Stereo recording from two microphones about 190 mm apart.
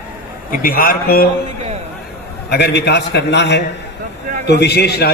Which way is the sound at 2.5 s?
60° left (ahead or behind).